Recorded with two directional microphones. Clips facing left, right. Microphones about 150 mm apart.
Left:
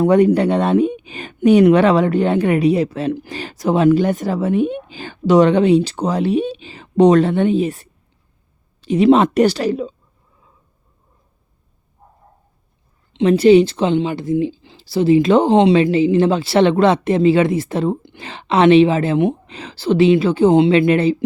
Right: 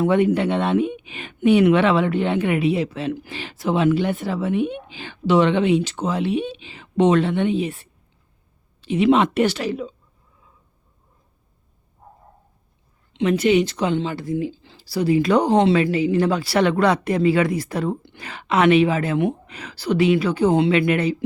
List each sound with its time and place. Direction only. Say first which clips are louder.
0.0 s speech: left 5 dB; 40° left (ahead or behind)
13.1 s speech: left 7 dB; 35° left (ahead or behind)